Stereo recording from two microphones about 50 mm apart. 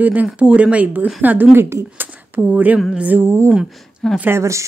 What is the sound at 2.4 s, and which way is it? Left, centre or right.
Speech, right.